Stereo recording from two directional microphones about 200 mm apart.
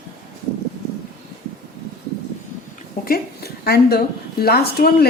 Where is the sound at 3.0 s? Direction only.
50° left (ahead or behind).